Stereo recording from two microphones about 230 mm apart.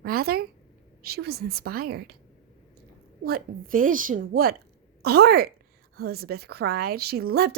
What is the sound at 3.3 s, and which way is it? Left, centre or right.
A woman's voice, right.